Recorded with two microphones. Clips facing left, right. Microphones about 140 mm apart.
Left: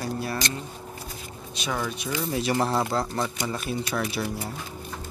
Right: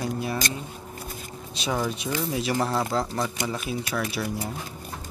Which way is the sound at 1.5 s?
30° right (ahead or behind).